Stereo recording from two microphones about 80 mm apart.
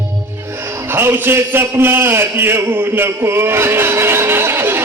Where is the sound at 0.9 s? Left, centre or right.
Right.